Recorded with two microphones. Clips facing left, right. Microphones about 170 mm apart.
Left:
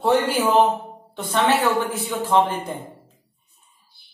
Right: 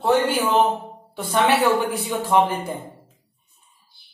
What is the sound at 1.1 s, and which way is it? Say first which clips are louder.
A woman's voice: right 1 dB; 10° right (ahead or behind).